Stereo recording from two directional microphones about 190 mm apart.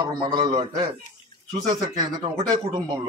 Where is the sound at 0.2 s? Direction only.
25° right (ahead or behind).